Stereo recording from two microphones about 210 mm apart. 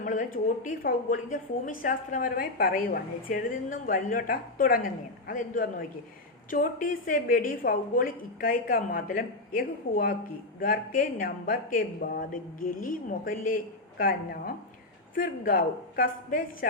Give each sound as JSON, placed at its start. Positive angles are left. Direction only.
{"t": 0.0, "sound": "a woman's voice", "side_deg": 40}